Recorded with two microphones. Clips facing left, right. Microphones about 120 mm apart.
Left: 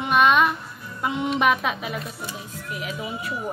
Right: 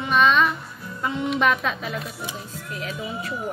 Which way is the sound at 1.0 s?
15° left (ahead or behind).